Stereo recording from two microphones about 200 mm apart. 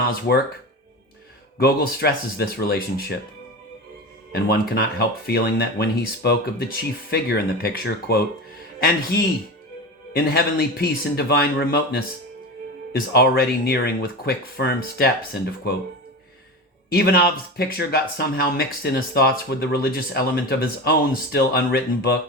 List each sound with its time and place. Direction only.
0.3 s speech: 50° left (ahead or behind)
1.5 s speech: 50° left (ahead or behind)
4.4 s speech: 50° left (ahead or behind)
12.9 s speech: 50° left (ahead or behind)
16.9 s speech: 50° left (ahead or behind)